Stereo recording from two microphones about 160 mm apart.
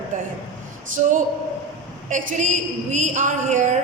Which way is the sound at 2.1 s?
50° right (ahead or behind).